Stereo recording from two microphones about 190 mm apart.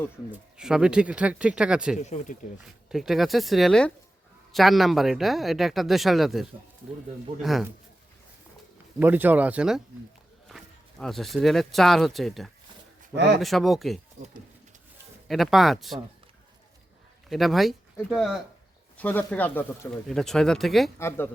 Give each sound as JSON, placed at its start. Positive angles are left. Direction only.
{"t": 0.3, "sound": "speech", "side_deg": -5}
{"t": 2.0, "sound": "speech", "side_deg": 40}
{"t": 2.6, "sound": "speech", "side_deg": -5}
{"t": 9.0, "sound": "speech", "side_deg": -10}
{"t": 13.1, "sound": "speech", "side_deg": -65}
{"t": 13.4, "sound": "speech", "side_deg": 0}
{"t": 15.3, "sound": "speech", "side_deg": 0}
{"t": 17.2, "sound": "speech", "side_deg": 0}